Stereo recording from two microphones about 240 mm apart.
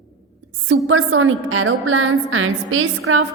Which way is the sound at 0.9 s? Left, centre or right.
Right.